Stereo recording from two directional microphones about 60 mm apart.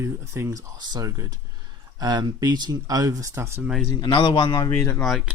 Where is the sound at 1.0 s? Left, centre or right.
Right.